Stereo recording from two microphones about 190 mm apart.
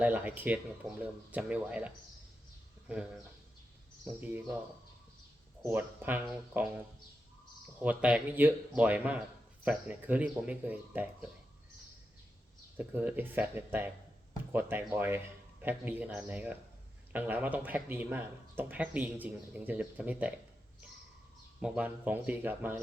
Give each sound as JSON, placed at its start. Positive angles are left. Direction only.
{"t": 0.0, "sound": "speech", "side_deg": -10}
{"t": 2.9, "sound": "speech", "side_deg": -5}
{"t": 5.6, "sound": "speech", "side_deg": -10}
{"t": 7.8, "sound": "speech", "side_deg": -5}
{"t": 12.7, "sound": "speech", "side_deg": -10}
{"t": 21.6, "sound": "speech", "side_deg": -10}